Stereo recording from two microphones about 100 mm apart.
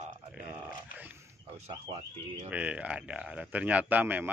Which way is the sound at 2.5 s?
15° right (ahead or behind).